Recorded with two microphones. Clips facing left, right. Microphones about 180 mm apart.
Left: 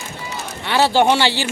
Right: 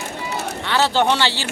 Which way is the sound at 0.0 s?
70° right (ahead or behind).